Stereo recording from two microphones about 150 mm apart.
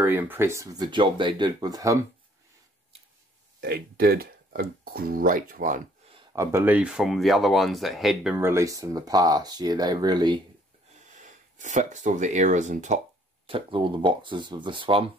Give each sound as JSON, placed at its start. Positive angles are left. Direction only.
{"t": 0.0, "sound": "speech", "side_deg": -15}
{"t": 3.6, "sound": "speech", "side_deg": -90}
{"t": 6.3, "sound": "speech", "side_deg": -20}
{"t": 8.4, "sound": "speech", "side_deg": -15}
{"t": 11.1, "sound": "speech", "side_deg": -55}
{"t": 13.5, "sound": "speech", "side_deg": -35}